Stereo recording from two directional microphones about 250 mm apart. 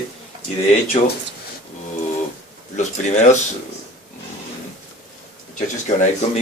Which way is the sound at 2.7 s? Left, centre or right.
Left.